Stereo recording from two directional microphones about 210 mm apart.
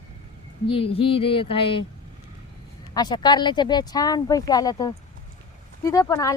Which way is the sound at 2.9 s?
20° left (ahead or behind).